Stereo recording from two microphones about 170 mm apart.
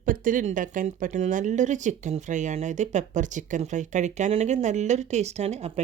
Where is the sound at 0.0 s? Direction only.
50° right (ahead or behind).